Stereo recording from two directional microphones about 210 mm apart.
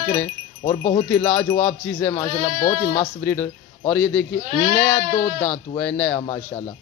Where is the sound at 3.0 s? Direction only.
5° left (ahead or behind).